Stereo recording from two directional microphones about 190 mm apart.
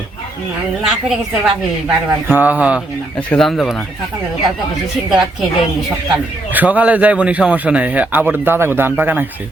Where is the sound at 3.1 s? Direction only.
5° left (ahead or behind).